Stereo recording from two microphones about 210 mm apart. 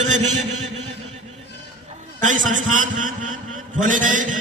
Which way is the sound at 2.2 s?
35° right (ahead or behind).